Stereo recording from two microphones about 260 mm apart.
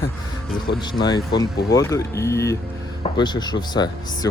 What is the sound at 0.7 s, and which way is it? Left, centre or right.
Speech, left.